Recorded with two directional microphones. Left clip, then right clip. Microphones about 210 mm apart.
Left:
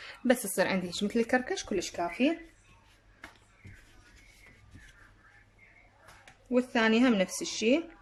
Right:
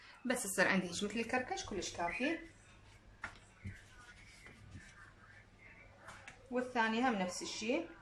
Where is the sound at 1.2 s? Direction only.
35° left (ahead or behind).